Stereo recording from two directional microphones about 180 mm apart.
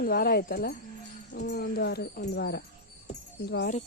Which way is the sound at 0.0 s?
55° left (ahead or behind).